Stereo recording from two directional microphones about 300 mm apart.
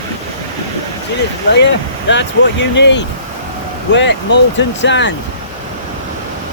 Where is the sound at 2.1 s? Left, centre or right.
Left.